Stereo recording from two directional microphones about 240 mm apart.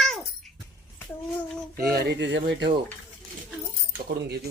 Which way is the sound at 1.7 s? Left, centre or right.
Right.